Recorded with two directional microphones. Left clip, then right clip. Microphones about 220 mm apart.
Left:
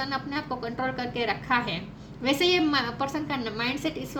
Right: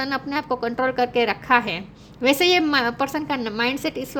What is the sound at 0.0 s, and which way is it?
A woman's voice, 50° right (ahead or behind).